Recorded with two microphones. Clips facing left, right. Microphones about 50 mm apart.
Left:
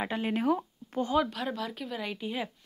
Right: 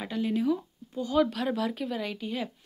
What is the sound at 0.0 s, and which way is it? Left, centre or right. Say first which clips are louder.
Speech: right 1 dB; left.